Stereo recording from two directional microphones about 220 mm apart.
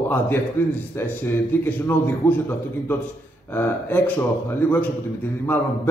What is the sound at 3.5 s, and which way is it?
Speech, 10° left (ahead or behind).